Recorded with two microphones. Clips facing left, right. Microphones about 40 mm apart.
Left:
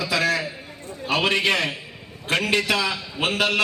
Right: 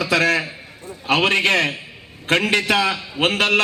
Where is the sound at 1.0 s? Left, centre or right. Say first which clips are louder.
Right 4 dB; right.